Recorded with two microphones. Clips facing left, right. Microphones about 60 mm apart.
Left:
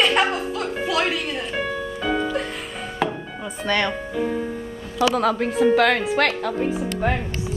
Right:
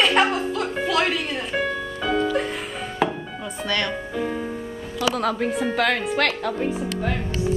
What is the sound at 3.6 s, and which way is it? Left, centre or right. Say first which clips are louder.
Speech: left 3 dB; centre.